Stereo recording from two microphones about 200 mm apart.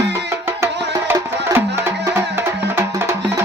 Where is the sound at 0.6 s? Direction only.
15° right (ahead or behind).